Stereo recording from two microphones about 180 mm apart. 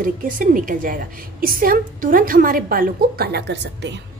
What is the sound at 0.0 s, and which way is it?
A woman's voice, 50° right (ahead or behind).